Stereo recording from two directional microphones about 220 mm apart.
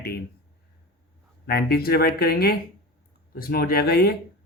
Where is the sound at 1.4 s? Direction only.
45° left (ahead or behind).